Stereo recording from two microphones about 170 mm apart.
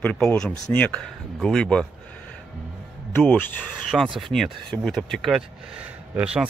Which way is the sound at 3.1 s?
10° left (ahead or behind).